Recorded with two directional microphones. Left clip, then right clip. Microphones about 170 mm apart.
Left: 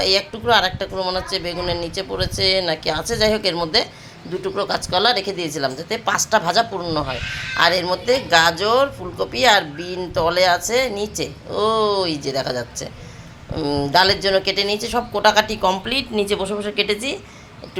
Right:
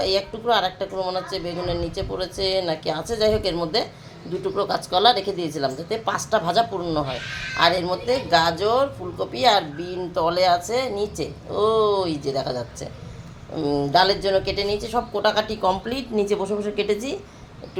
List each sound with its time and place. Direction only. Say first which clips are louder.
0.0 s speech: left 4 dB; centre (ahead or behind)